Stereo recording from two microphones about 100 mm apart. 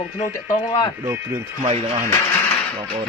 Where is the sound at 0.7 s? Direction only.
45° left (ahead or behind).